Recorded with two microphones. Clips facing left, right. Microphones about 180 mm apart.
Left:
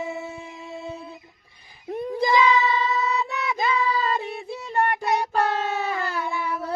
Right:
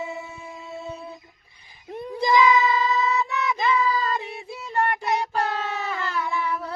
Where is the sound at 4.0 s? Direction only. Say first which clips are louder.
Left 2 dB; 30° left (ahead or behind).